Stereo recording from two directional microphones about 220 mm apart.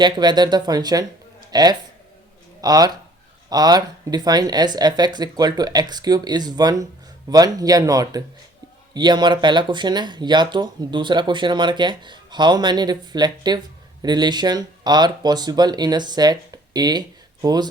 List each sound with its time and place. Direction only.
0.0 s speech: 20° right (ahead or behind)